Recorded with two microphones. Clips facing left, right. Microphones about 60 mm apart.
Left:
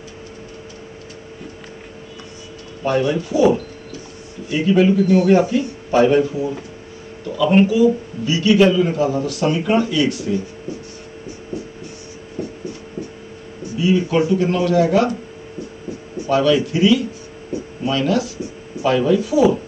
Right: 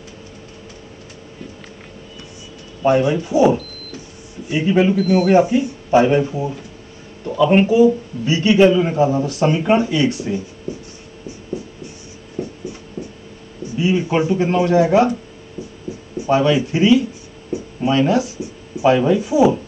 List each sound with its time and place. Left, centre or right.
2.8 s a man's voice: right
5.4 s speech: centre
7.2 s a man's voice: right
12.4 s writing: centre
13.7 s a man's voice: right
16.3 s a man's voice: right
17.5 s a sound: right
18.8 s a man's voice: right